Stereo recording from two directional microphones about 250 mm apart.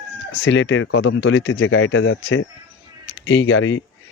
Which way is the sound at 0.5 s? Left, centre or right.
Left.